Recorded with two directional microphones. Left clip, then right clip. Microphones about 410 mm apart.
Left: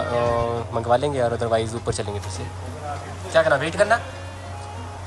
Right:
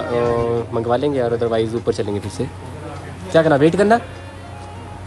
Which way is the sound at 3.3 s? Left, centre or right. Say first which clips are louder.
Right 5 dB; centre.